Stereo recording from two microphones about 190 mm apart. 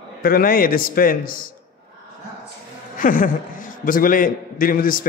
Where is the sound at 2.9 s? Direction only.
45° left (ahead or behind).